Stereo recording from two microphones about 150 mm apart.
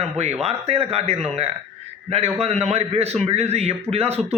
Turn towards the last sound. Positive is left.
turn(degrees=-45)  # may be behind; listen again after turning